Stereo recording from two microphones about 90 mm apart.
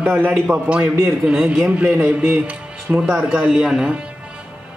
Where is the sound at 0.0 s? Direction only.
25° right (ahead or behind).